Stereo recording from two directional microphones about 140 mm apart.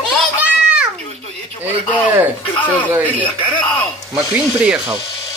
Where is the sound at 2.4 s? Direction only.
35° left (ahead or behind).